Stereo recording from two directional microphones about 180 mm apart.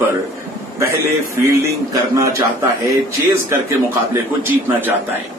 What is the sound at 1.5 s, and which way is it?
Speech, 15° right (ahead or behind).